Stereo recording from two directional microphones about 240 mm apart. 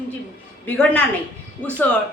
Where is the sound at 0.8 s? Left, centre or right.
Centre.